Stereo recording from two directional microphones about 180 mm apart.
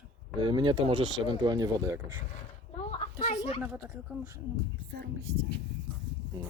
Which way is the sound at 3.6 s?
10° right (ahead or behind).